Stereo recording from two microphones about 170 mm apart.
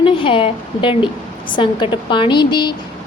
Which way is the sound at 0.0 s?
30° left (ahead or behind).